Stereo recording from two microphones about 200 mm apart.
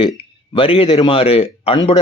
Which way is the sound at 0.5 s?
25° left (ahead or behind).